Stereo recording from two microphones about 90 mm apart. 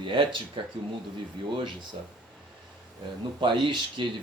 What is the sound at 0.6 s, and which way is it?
Speech, 65° right (ahead or behind).